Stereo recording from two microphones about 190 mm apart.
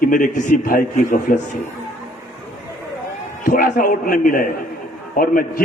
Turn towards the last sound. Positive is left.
turn(degrees=50)  # may be behind; listen again after turning